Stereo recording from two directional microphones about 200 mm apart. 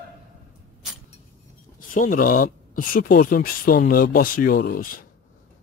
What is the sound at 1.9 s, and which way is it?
Speech, 45° left (ahead or behind).